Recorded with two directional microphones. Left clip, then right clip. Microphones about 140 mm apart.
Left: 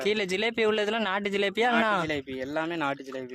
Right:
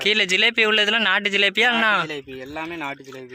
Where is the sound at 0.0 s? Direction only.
5° left (ahead or behind).